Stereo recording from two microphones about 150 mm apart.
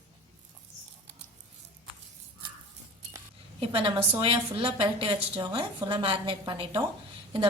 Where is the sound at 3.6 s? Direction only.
35° right (ahead or behind).